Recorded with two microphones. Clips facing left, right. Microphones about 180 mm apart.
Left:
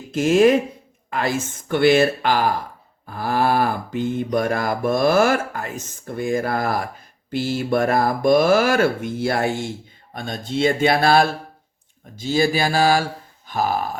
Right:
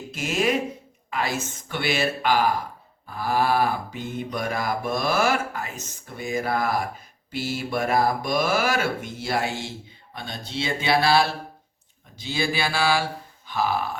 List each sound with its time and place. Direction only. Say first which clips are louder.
0.1 s cattle: left 10 dB; 50° left (ahead or behind)